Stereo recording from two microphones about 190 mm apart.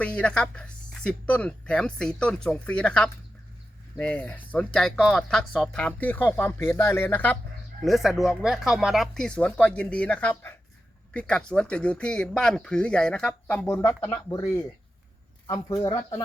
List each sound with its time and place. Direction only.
0.0 s speech: 5° left (ahead or behind)
7.9 s speech: centre (ahead or behind)
15.4 s speech: 20° left (ahead or behind)